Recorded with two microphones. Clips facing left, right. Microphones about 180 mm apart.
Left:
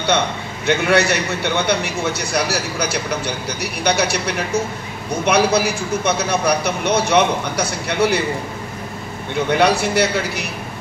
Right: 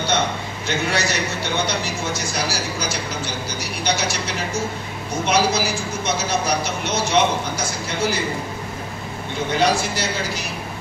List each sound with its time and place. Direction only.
0.7 s a man's voice: 60° left (ahead or behind)
5.2 s a man's voice: 60° left (ahead or behind)
9.5 s a man's voice: 60° left (ahead or behind)